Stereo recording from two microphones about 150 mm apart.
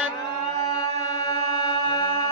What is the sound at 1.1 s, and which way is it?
Music, 25° left (ahead or behind).